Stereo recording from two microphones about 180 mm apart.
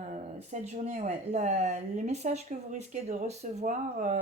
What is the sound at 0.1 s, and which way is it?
Speech, 40° right (ahead or behind).